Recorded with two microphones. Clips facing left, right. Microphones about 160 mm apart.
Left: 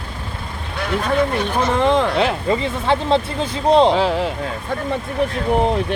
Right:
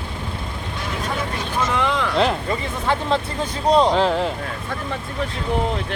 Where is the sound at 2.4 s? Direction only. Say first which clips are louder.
Left 4 dB; 25° left (ahead or behind).